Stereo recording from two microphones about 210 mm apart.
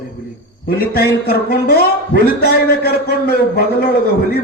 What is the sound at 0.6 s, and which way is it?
A man's voice, 45° left (ahead or behind).